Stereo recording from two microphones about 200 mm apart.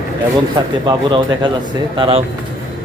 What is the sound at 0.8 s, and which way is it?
Speech, 20° right (ahead or behind).